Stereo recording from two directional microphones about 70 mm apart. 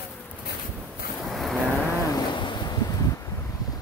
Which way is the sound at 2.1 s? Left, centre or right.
Left.